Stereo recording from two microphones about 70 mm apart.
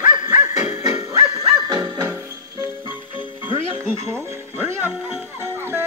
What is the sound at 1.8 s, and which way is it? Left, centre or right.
Music, right.